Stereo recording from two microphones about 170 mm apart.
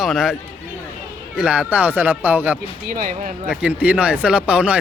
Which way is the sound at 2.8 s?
55° right (ahead or behind).